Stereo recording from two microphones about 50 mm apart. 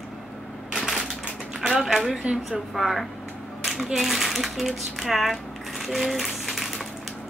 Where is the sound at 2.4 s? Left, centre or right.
Centre.